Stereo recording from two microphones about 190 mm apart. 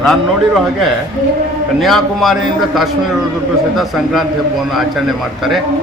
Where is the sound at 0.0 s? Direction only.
Centre (ahead or behind).